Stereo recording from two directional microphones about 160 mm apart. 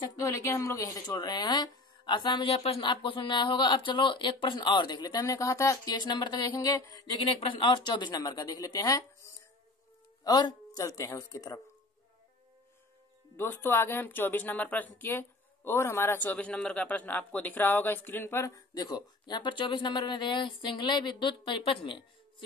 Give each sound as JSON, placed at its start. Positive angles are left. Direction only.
{"t": 0.1, "sound": "speech", "side_deg": 20}
{"t": 13.4, "sound": "speech", "side_deg": 15}